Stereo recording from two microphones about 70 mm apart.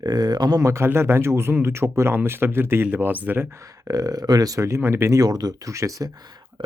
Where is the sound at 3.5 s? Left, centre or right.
Right.